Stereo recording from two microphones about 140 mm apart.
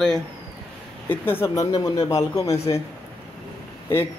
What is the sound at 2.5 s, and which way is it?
Speech, 45° left (ahead or behind).